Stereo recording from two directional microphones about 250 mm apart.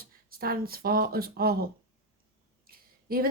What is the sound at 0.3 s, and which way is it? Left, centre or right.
Speech, right.